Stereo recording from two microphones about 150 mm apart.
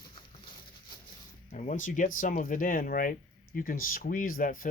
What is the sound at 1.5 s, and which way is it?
Speech, 55° left (ahead or behind).